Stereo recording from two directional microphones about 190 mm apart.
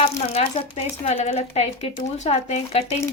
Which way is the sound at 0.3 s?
30° left (ahead or behind).